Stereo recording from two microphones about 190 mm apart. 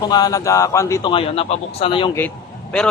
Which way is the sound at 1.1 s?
30° left (ahead or behind).